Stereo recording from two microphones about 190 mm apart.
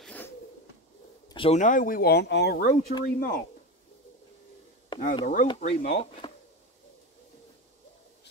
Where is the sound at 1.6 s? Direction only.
45° left (ahead or behind).